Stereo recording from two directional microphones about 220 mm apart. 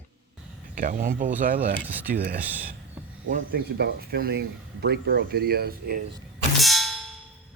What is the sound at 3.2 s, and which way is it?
Speech, 40° right (ahead or behind).